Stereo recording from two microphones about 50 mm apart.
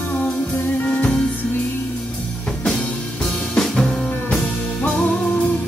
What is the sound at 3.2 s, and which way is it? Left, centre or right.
Music, centre.